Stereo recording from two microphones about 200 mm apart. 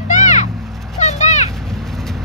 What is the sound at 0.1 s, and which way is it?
Vehicle, 35° left (ahead or behind).